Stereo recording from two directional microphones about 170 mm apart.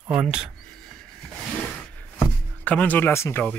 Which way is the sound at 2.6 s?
10° left (ahead or behind).